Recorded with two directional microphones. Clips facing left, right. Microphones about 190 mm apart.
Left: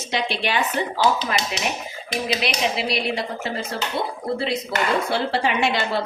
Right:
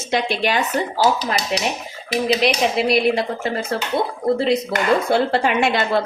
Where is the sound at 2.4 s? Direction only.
50° right (ahead or behind).